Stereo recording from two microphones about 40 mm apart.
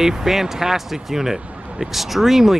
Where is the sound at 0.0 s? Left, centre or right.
Centre.